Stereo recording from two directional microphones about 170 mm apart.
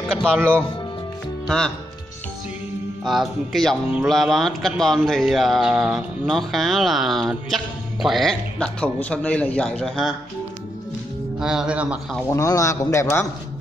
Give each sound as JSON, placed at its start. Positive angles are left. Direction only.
{"t": 0.4, "sound": "speech", "side_deg": -15}
{"t": 3.0, "sound": "speech", "side_deg": 0}
{"t": 11.3, "sound": "speech", "side_deg": -5}
{"t": 12.3, "sound": "a man's voice", "side_deg": 20}